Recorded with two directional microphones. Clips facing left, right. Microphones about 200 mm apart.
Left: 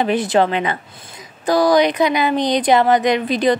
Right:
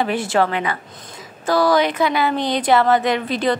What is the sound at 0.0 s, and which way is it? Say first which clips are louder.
A woman's voice: left 3 dB; 20° left (ahead or behind).